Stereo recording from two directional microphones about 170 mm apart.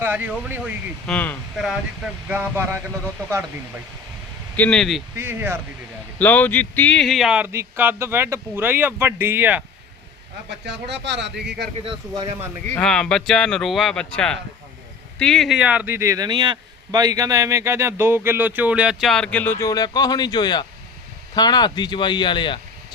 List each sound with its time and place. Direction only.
0.0 s speech: 10° right (ahead or behind)
1.0 s speech: 10° left (ahead or behind); by 2.8 s 15° right (ahead or behind)
4.5 s speech: 5° left (ahead or behind)
5.1 s speech: 10° right (ahead or behind)
6.1 s speech: 10° left (ahead or behind); by 9.6 s 10° right (ahead or behind)
10.7 s speech: 90° right
11.9 s speech: 30° right (ahead or behind)
12.7 s speech: 5° left (ahead or behind); by 22.6 s 30° left (ahead or behind)